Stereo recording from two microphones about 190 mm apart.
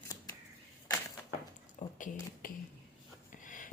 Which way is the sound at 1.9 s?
45° left (ahead or behind).